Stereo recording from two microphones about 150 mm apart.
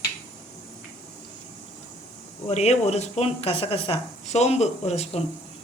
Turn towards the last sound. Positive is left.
turn(degrees=45)  # may be behind; listen again after turning